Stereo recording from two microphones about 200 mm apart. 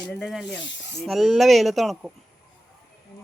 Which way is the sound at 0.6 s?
65° left (ahead or behind).